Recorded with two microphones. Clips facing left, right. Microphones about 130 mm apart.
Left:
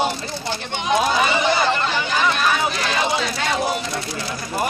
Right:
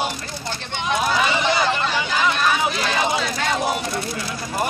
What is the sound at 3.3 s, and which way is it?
Speech, 5° left (ahead or behind).